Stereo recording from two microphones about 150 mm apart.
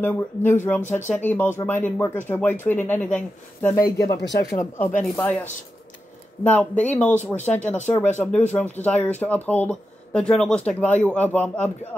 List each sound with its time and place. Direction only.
0.0 s speech: 10° left (ahead or behind)
3.8 s speech: 25° left (ahead or behind)